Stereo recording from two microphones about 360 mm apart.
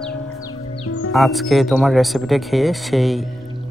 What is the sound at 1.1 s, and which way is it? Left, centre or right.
Speech, centre.